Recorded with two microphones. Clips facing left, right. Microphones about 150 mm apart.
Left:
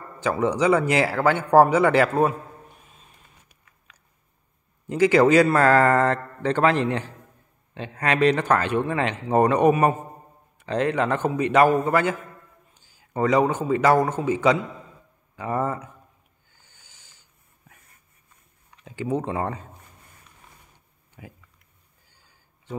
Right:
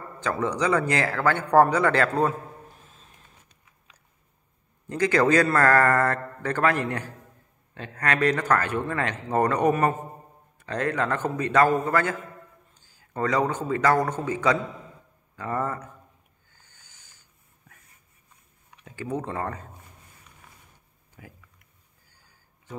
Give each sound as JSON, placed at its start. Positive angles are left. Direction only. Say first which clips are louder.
{"t": 0.2, "sound": "a man's voice", "louder": "left 4 dB", "side_deg": 20}
{"t": 2.8, "sound": "vehicle", "louder": "even", "side_deg": 5}
{"t": 4.8, "sound": "a man's voice", "louder": "left 5 dB", "side_deg": 20}
{"t": 16.6, "sound": "a sound", "louder": "left 3 dB", "side_deg": 15}
{"t": 18.9, "sound": "a man's voice", "louder": "left 4 dB", "side_deg": 20}
{"t": 21.2, "sound": "speech", "louder": "left 3 dB", "side_deg": 20}